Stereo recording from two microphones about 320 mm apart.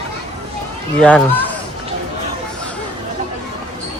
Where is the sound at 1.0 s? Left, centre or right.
Centre.